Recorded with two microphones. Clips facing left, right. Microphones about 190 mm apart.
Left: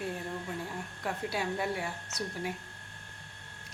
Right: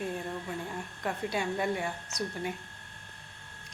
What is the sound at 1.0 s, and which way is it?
A woman's voice, 5° left (ahead or behind).